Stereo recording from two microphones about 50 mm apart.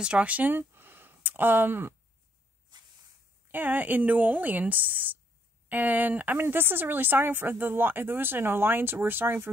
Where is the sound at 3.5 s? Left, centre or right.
Right.